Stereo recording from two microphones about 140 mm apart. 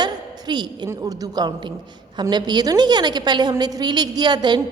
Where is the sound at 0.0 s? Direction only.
30° right (ahead or behind).